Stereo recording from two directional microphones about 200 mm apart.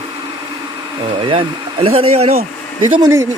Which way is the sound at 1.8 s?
30° right (ahead or behind).